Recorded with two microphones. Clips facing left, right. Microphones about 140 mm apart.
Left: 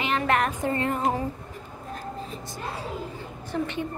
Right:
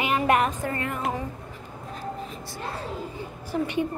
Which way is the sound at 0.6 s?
30° left (ahead or behind).